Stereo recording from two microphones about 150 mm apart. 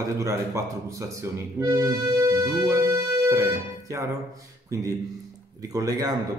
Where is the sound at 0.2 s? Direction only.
20° right (ahead or behind).